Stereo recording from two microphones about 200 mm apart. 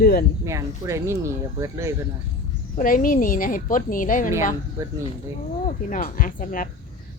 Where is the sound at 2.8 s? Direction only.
40° left (ahead or behind).